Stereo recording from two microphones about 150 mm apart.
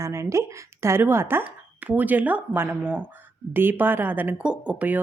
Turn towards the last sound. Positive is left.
turn(degrees=-10)  # may be behind; listen again after turning